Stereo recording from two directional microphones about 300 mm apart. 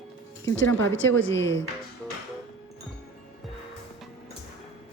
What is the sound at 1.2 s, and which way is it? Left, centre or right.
Speech, left.